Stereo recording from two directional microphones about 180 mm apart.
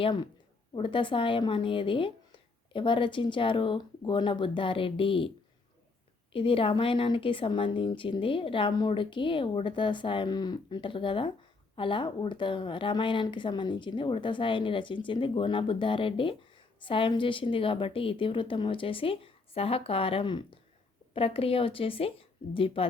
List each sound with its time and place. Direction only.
0.0 s speech: 25° left (ahead or behind)
6.3 s speech: 30° left (ahead or behind)